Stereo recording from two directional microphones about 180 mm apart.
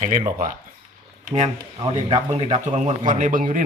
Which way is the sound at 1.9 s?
35° right (ahead or behind).